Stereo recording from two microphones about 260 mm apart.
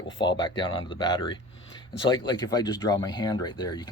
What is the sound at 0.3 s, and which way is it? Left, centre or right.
Speech, centre.